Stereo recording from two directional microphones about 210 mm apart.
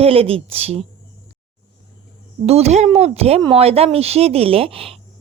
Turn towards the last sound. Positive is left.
turn(degrees=-25)  # may be behind; listen again after turning